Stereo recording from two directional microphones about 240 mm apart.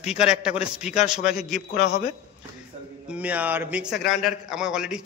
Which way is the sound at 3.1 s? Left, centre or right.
Centre.